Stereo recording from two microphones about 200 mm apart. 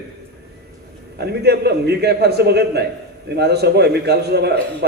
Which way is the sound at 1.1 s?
55° right (ahead or behind).